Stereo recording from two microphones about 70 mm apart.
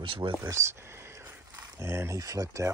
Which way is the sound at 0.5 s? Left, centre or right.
Right.